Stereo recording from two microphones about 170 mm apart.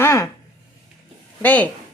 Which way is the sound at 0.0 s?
15° left (ahead or behind).